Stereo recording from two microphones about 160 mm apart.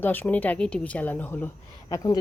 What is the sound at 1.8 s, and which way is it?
Speech, 25° left (ahead or behind).